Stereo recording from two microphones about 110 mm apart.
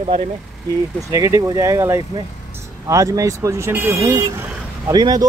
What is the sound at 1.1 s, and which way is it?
Speech, 30° right (ahead or behind).